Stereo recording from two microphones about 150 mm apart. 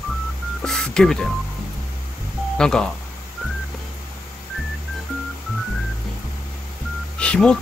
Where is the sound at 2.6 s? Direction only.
5° left (ahead or behind).